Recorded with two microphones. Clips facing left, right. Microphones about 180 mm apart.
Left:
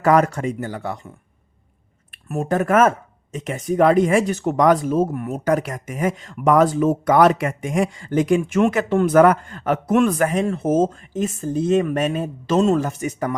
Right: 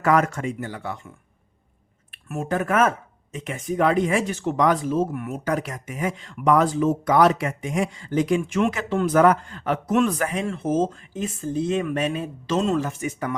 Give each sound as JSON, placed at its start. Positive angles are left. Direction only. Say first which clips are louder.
{"t": 0.0, "sound": "speech", "louder": "left 4 dB", "side_deg": 35}
{"t": 2.3, "sound": "speech", "louder": "left 5 dB", "side_deg": 40}